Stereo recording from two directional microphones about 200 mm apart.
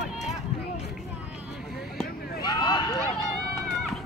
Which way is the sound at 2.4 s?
20° left (ahead or behind).